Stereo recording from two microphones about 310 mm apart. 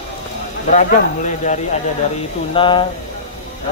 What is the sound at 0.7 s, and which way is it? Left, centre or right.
Speech, left.